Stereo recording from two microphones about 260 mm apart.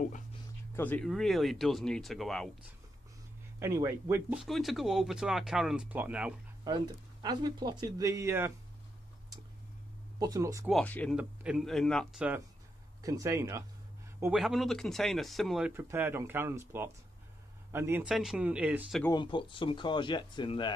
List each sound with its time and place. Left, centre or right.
0.7 s speech: centre
3.5 s speech: centre
10.1 s speech: centre
10.7 s speech: centre
19.1 s speech: centre